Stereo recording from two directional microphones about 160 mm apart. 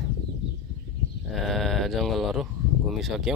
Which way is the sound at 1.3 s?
Centre (ahead or behind).